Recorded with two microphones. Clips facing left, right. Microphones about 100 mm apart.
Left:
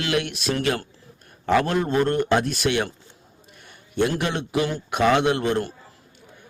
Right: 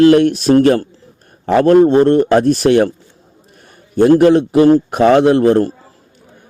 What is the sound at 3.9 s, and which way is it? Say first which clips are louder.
A man's voice: right 15 dB; 40° right (ahead or behind).